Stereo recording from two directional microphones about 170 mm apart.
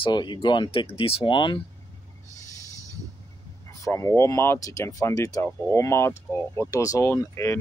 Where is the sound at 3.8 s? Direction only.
15° left (ahead or behind).